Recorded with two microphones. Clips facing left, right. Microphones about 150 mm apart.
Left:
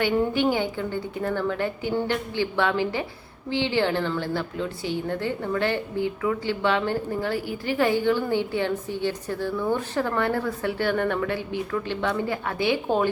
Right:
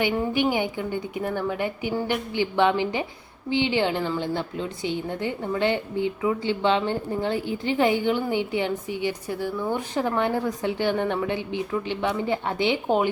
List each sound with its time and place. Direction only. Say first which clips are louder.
0.2 s a woman's voice: left 1 dB; 10° right (ahead or behind)